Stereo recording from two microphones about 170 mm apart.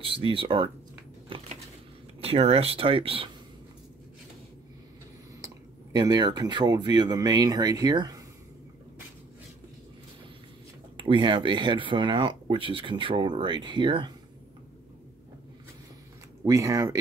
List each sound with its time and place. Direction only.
0.0 s speech: 30° right (ahead or behind)
1.3 s a sound: 35° right (ahead or behind)
2.2 s speech: 35° right (ahead or behind)
5.9 s speech: 25° right (ahead or behind)
11.0 s speech: 30° right (ahead or behind)
16.4 s speech: 20° right (ahead or behind)